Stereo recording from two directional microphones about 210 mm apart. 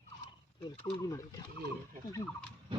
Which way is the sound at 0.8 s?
15° left (ahead or behind).